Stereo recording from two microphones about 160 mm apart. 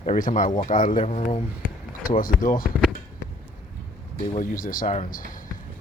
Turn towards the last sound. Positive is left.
turn(degrees=50)  # may be behind; listen again after turning